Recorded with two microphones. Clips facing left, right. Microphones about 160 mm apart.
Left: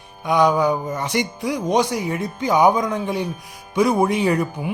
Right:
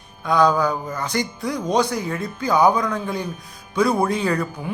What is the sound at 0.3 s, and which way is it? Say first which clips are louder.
A woman's voice: left 1 dB; 15° left (ahead or behind).